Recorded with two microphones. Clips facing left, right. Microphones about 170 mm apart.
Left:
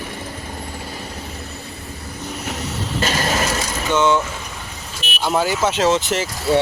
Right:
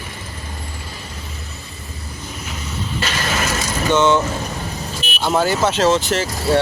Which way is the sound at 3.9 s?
10° left (ahead or behind).